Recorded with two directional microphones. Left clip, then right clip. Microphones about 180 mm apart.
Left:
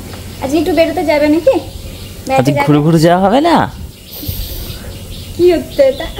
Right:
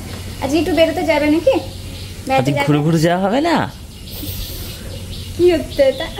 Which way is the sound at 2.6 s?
20° left (ahead or behind).